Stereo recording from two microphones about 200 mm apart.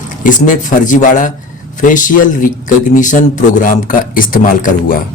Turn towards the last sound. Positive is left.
turn(degrees=45)  # may be behind; listen again after turning